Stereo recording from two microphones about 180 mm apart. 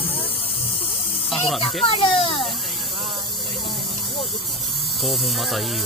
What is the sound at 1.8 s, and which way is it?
Speech, 30° left (ahead or behind).